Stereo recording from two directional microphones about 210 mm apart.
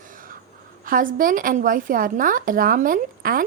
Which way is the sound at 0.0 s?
40° right (ahead or behind).